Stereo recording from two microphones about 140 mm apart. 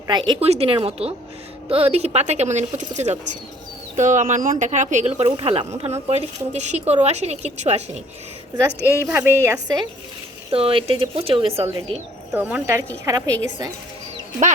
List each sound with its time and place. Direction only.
0.1 s speech: 35° right (ahead or behind)
0.4 s a woman's voice: 45° right (ahead or behind)
9.0 s a woman's voice: 15° right (ahead or behind)
10.5 s speech: 40° right (ahead or behind)
12.3 s a woman's voice: 10° right (ahead or behind)
13.1 s a woman's voice: 25° right (ahead or behind)